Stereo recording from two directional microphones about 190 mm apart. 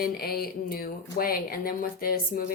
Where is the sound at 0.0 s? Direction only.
55° left (ahead or behind).